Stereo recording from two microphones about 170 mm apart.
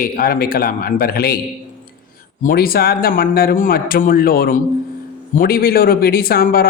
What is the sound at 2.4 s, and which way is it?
A man's voice, 60° left (ahead or behind).